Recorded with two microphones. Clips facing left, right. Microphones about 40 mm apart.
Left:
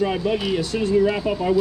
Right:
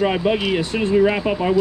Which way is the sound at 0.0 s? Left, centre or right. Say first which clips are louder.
Right 3 dB; right.